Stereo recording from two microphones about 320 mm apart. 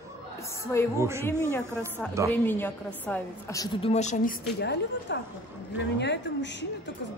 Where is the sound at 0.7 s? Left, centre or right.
Centre.